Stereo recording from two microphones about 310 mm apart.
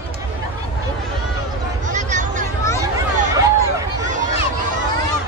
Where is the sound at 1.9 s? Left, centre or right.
Right.